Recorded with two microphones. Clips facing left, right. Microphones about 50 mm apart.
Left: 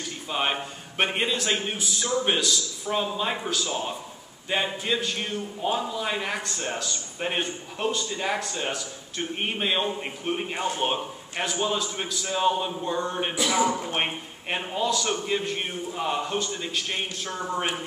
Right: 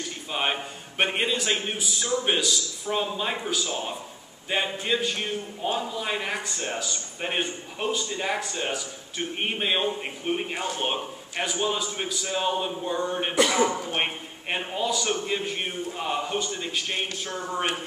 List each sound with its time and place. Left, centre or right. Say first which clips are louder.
0.3 s a man's voice: left 1 dB; centre